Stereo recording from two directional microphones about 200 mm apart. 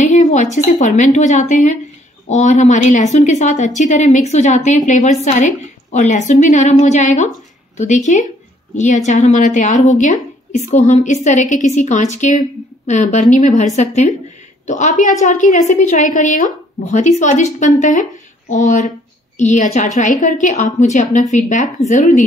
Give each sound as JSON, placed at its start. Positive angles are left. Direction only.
{"t": 0.0, "sound": "a woman's voice", "side_deg": 35}